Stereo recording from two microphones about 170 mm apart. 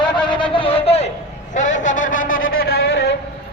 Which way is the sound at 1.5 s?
45° left (ahead or behind).